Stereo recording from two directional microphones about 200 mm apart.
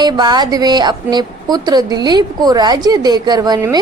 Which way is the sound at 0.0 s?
20° right (ahead or behind).